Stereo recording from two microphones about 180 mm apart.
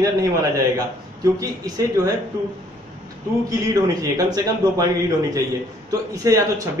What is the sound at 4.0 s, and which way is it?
Speech, 20° right (ahead or behind).